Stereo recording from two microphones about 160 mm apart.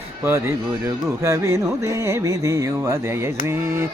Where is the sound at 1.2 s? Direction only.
20° right (ahead or behind).